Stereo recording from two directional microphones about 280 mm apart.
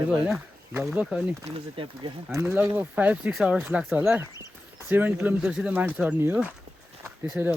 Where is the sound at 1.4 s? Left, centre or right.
Centre.